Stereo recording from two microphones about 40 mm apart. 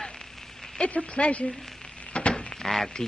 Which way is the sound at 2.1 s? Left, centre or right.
Left.